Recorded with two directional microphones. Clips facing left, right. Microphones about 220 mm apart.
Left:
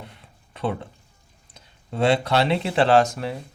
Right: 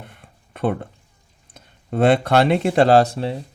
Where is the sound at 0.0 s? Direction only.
55° right (ahead or behind).